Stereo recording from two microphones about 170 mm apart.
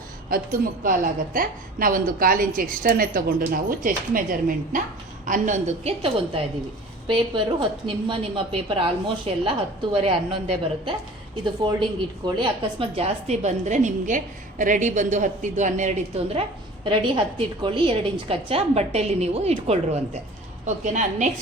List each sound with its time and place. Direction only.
0.3 s a woman's voice: 55° right (ahead or behind); by 10.9 s 35° right (ahead or behind)
12.2 s a woman's voice: 30° right (ahead or behind)